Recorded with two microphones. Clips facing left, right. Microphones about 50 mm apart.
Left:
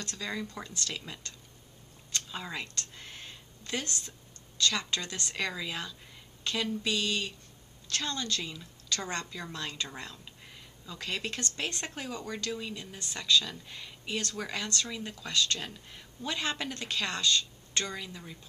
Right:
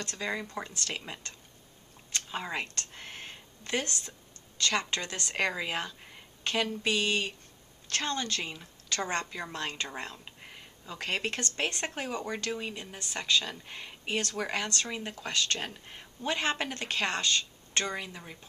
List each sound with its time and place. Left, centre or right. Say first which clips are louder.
0.0 s speech: right 2 dB; right